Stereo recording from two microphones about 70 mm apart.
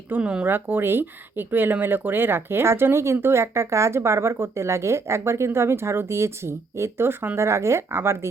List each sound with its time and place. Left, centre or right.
0.2 s speech: centre
0.4 s speech: right